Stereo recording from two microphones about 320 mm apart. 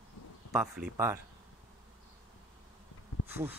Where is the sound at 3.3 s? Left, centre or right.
Centre.